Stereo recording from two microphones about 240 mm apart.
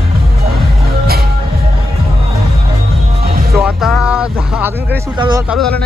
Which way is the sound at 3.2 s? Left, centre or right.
Right.